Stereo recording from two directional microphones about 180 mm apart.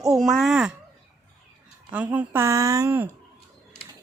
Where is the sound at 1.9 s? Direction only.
10° right (ahead or behind).